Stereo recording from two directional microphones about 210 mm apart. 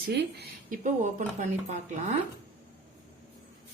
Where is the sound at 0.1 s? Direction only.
45° right (ahead or behind).